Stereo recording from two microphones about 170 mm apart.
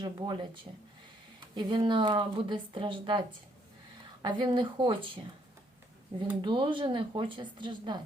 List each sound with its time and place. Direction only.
0.0 s a woman's voice: 25° right (ahead or behind)
1.5 s a woman's voice: 25° right (ahead or behind)
6.4 s a woman's voice: 30° right (ahead or behind)